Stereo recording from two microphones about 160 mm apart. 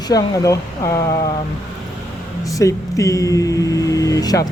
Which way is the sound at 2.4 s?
20° left (ahead or behind).